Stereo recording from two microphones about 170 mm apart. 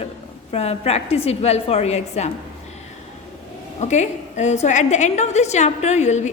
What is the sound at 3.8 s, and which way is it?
A woman's voice, 45° left (ahead or behind).